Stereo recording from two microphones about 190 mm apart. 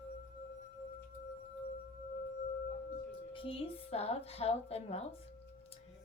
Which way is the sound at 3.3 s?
30° left (ahead or behind).